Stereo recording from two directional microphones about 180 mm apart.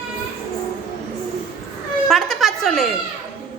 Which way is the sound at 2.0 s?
Centre (ahead or behind).